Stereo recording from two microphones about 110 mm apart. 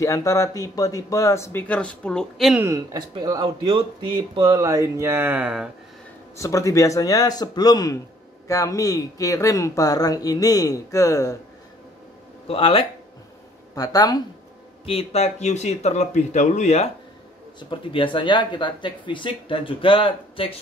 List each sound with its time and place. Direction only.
0.0 s speech: 30° left (ahead or behind); by 2.6 s centre (ahead or behind)
2.6 s speech: 30° right (ahead or behind)
3.2 s speech: 40° right (ahead or behind); by 5.7 s 10° right (ahead or behind)
6.3 s speech: 30° left (ahead or behind)
12.4 s speech: 60° left (ahead or behind)
13.7 s speech: 35° left (ahead or behind)
14.9 s speech: 65° left (ahead or behind); by 16.9 s 85° left
17.6 s speech: 50° left (ahead or behind)